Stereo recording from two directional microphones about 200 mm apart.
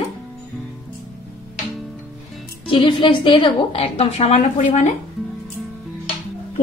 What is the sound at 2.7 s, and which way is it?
A woman's voice, 25° left (ahead or behind).